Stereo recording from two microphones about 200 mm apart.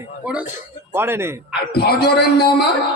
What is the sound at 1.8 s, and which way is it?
Speech, 50° left (ahead or behind).